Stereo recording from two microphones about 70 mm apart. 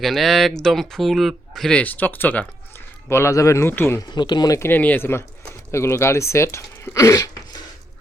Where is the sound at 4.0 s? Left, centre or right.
Left.